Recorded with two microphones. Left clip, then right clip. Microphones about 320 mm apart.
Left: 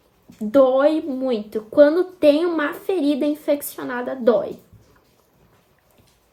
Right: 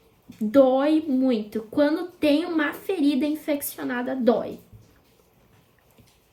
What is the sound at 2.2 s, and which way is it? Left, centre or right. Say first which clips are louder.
A woman's voice: left 5 dB; centre.